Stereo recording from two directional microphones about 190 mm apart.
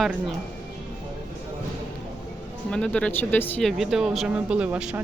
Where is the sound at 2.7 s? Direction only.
5° left (ahead or behind).